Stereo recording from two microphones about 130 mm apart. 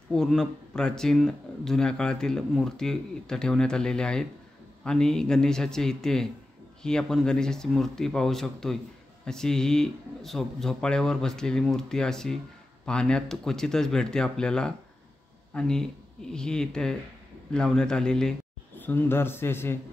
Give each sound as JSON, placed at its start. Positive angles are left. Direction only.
{"t": 0.1, "sound": "speech", "side_deg": 5}